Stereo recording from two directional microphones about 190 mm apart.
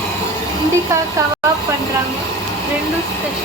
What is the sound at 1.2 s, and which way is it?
Speech, 15° right (ahead or behind).